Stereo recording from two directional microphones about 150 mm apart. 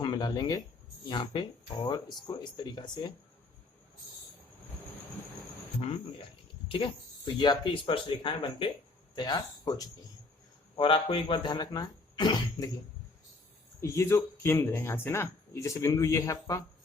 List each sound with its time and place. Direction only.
0.0 s a sound: 25° left (ahead or behind)
1.1 s speech: 30° left (ahead or behind)
6.7 s speech: 35° left (ahead or behind)
10.8 s speech: 35° left (ahead or behind)
13.8 s speech: 20° left (ahead or behind)